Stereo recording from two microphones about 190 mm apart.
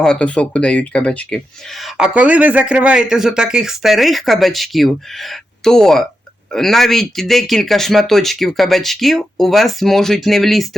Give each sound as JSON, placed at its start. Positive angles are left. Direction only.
{"t": 0.0, "sound": "speech", "side_deg": 5}